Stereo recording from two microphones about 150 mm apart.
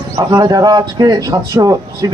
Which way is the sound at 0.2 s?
25° right (ahead or behind).